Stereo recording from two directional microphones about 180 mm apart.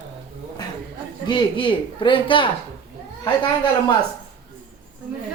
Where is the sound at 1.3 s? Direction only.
25° left (ahead or behind).